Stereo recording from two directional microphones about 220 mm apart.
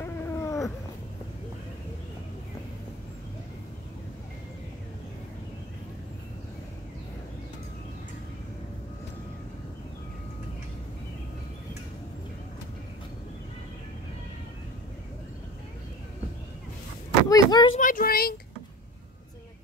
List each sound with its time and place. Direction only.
0.0 s cat: 15° left (ahead or behind)
17.3 s a sound: 15° left (ahead or behind)
17.7 s speech: 40° left (ahead or behind)